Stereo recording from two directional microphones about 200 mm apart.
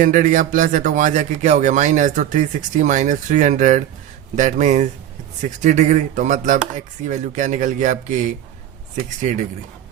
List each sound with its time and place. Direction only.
0.0 s speech: 40° right (ahead or behind)